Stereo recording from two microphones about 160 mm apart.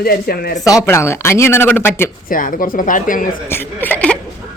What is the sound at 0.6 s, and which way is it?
A woman's voice, 20° left (ahead or behind).